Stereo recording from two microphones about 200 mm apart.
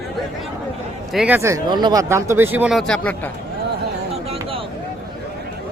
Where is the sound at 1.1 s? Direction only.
5° right (ahead or behind).